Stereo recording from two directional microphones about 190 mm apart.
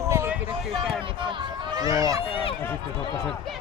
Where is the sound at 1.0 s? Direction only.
25° right (ahead or behind).